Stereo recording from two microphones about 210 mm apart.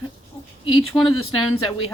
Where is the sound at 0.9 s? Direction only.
15° left (ahead or behind).